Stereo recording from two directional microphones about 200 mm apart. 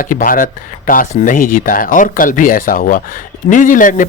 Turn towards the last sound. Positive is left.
turn(degrees=40)  # may be behind; listen again after turning